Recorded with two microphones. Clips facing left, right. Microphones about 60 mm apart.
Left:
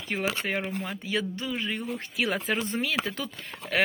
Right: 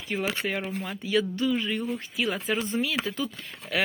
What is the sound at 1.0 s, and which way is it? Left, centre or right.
Speech, left.